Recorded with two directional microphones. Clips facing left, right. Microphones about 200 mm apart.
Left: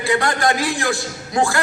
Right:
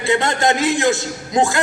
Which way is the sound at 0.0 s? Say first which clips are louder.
Right 1 dB; 25° right (ahead or behind).